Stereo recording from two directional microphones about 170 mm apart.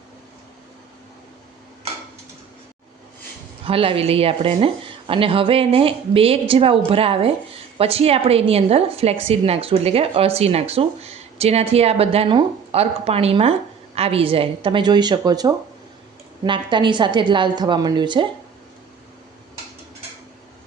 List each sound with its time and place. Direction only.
3.7 s a woman's voice: 35° right (ahead or behind)